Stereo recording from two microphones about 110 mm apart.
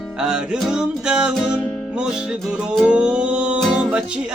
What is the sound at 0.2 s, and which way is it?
Music, 5° right (ahead or behind).